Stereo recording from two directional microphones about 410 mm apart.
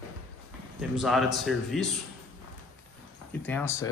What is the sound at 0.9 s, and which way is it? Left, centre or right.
Speech, centre.